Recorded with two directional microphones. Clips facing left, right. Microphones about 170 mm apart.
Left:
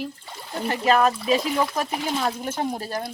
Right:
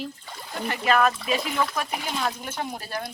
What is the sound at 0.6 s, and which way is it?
Speech, 35° left (ahead or behind).